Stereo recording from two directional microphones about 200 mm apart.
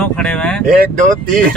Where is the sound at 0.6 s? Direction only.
45° right (ahead or behind).